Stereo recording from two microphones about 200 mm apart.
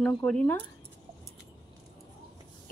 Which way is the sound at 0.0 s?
5° left (ahead or behind).